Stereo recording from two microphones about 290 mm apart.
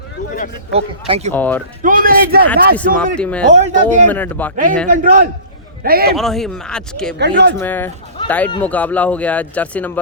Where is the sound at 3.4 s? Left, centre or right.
Right.